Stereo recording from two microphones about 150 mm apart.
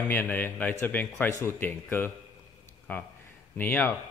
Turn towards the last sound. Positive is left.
turn(degrees=10)  # may be behind; listen again after turning